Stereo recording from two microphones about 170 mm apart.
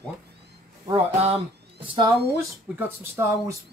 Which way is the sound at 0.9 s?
35° right (ahead or behind).